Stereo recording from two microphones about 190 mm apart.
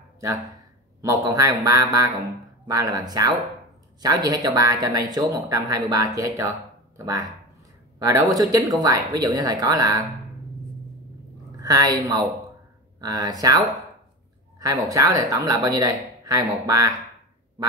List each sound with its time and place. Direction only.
1.0 s speech: 20° right (ahead or behind)
8.0 s speech: 15° right (ahead or behind)
11.6 s speech: 20° right (ahead or behind)